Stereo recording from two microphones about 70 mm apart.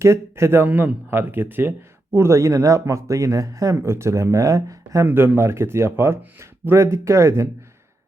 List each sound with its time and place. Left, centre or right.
0.0 s speech: right
0.7 s a man's voice: right
1.1 s speech: right
2.1 s speech: right
5.0 s speech: right